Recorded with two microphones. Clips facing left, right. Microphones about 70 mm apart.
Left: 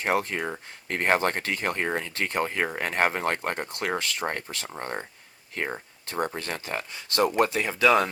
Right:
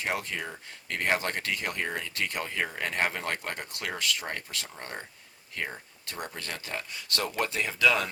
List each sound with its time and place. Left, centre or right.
0.0 s speech: left